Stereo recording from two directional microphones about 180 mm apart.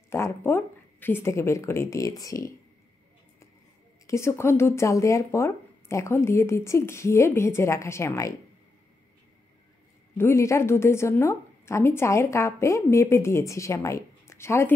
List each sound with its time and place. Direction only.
0.1 s a woman's voice: 15° left (ahead or behind)
4.1 s a woman's voice: 15° left (ahead or behind)
10.1 s a woman's voice: 15° left (ahead or behind)